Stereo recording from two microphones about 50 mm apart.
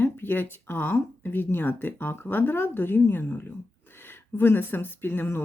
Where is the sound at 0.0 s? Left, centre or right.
Left.